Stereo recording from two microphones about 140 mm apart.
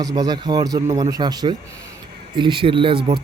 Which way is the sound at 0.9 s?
40° right (ahead or behind).